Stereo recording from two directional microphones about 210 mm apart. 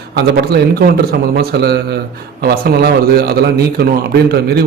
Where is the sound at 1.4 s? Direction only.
50° right (ahead or behind).